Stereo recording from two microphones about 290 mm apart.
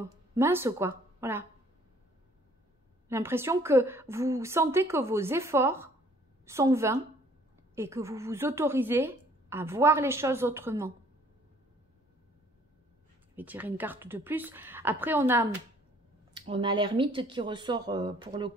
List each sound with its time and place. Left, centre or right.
0.0 s a woman's voice: centre
3.1 s speech: centre
13.4 s speech: centre